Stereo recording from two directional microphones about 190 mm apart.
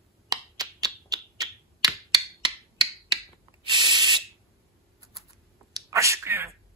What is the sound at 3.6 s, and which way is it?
Spray, 25° right (ahead or behind).